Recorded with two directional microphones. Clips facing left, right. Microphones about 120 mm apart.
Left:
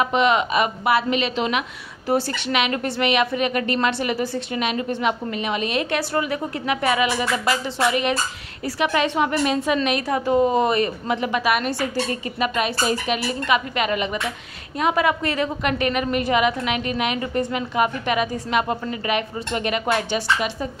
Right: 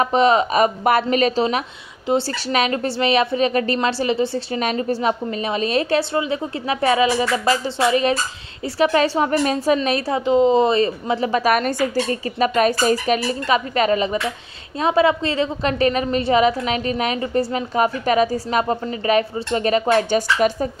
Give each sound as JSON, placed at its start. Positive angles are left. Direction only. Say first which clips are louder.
{"t": 0.0, "sound": "a woman's voice", "louder": "right 3 dB", "side_deg": -35}